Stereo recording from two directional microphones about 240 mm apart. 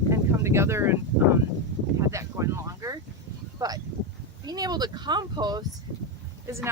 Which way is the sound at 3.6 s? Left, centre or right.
Centre.